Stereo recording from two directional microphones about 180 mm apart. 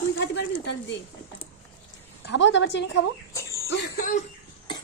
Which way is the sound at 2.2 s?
80° left.